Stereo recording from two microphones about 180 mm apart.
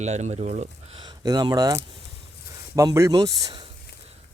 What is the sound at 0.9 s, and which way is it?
Speech, 20° right (ahead or behind).